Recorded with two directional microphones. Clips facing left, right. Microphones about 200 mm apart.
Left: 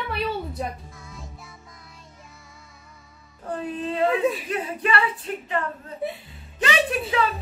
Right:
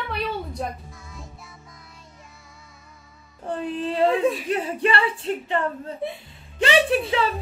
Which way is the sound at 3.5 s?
30° right (ahead or behind).